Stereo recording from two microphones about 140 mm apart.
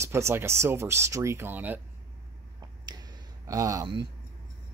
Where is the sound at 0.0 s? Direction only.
20° right (ahead or behind).